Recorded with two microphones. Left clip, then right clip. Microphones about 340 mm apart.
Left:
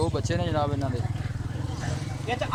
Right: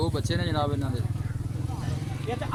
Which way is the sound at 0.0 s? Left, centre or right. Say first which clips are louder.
Left 2 dB; centre.